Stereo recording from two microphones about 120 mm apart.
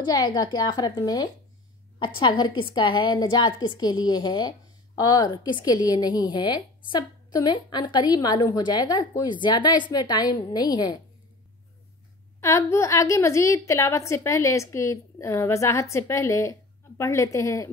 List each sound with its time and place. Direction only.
0.0 s a woman's voice: 35° left (ahead or behind)
12.4 s a woman's voice: 20° left (ahead or behind)